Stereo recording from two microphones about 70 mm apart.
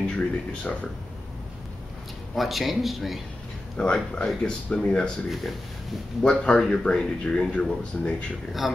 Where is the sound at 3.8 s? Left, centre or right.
Centre.